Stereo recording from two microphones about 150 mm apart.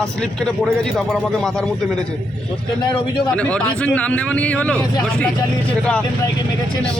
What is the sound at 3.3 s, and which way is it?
A man's voice, 10° left (ahead or behind).